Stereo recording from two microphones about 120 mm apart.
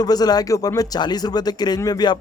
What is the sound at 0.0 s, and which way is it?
Speech, 35° left (ahead or behind).